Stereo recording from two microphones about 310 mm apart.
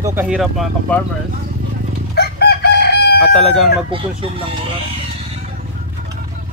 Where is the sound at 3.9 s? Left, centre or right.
Centre.